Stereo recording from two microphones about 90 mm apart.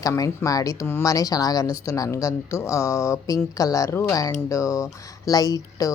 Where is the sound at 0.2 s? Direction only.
40° left (ahead or behind).